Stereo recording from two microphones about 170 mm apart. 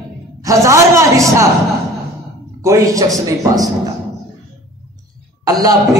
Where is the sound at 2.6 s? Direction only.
20° right (ahead or behind).